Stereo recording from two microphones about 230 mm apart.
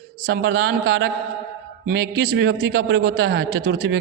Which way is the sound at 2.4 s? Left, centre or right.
Right.